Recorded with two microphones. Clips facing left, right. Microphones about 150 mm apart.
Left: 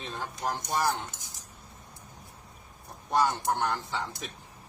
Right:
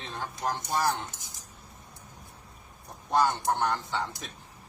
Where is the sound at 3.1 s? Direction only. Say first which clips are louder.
Right 1 dB; centre (ahead or behind).